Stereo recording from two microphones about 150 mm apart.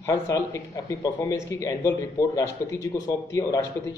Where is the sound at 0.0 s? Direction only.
20° left (ahead or behind).